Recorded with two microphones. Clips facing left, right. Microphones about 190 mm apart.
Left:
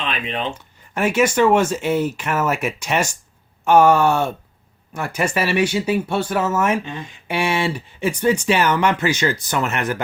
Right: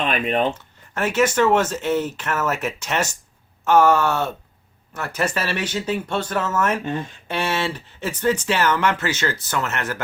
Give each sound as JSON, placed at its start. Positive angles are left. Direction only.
{"t": 0.0, "sound": "speech", "side_deg": -50}
{"t": 0.5, "sound": "speech", "side_deg": 10}